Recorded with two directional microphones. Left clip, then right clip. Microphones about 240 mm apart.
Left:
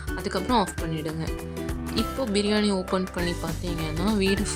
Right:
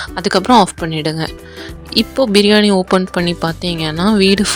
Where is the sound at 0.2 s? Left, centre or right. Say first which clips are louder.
Right 14 dB; right.